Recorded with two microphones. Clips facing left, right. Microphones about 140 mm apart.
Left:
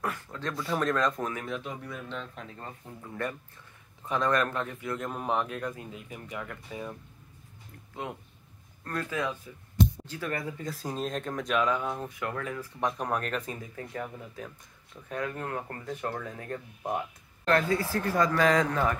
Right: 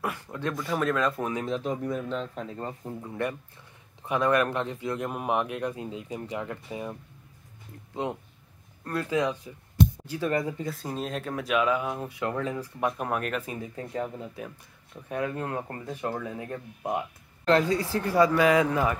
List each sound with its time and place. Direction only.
0.0 s speech: 10° right (ahead or behind)
1.4 s speech: 35° right (ahead or behind)
3.0 s speech: 15° right (ahead or behind)
8.8 s speech: 15° right (ahead or behind)
10.6 s speech: centre (ahead or behind)
12.2 s speech: 25° right (ahead or behind)
12.8 s speech: 5° right (ahead or behind)
13.6 s speech: 20° right (ahead or behind)